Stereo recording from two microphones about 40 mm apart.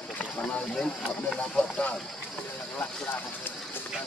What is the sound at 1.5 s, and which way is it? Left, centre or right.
Speech, left.